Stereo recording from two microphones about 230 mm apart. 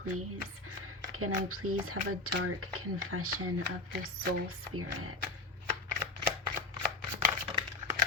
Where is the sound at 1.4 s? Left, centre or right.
Right.